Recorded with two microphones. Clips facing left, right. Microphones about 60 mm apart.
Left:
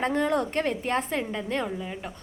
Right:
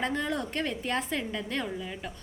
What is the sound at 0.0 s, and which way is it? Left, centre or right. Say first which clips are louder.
A woman's voice: left 6 dB; left.